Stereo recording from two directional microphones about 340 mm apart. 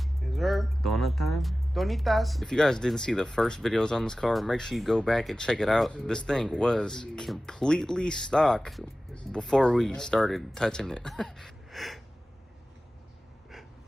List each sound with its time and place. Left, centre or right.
0.0 s speech: centre